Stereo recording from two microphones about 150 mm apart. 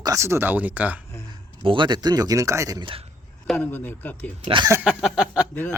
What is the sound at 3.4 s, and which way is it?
Speech, 5° left (ahead or behind).